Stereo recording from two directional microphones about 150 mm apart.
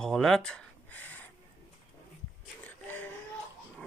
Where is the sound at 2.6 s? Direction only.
10° left (ahead or behind).